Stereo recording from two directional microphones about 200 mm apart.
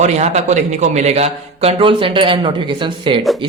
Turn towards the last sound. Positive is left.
turn(degrees=-25)  # may be behind; listen again after turning